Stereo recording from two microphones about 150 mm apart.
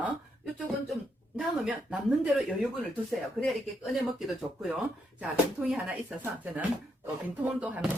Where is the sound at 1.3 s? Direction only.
5° right (ahead or behind).